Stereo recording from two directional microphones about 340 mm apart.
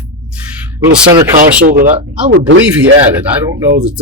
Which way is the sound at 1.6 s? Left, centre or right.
Right.